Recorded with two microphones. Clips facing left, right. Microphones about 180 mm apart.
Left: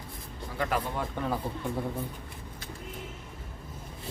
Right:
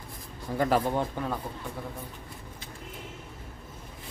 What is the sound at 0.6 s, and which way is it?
Speech, 30° right (ahead or behind).